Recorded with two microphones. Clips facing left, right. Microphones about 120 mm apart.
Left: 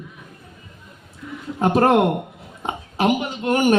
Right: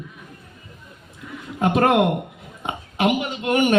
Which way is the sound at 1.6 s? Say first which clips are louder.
Left 1 dB; 35° left (ahead or behind).